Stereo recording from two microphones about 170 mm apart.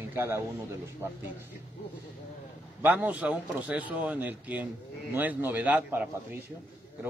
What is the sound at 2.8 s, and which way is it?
Speech, 10° right (ahead or behind).